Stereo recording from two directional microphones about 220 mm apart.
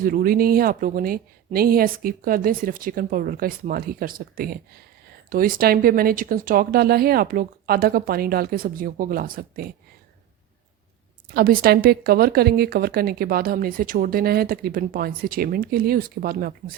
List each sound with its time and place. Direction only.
0.0 s speech: 40° right (ahead or behind)
11.3 s a woman's voice: 40° right (ahead or behind)